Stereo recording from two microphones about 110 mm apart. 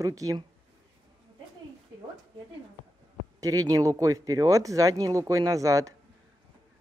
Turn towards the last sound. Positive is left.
turn(degrees=-30)  # may be behind; listen again after turning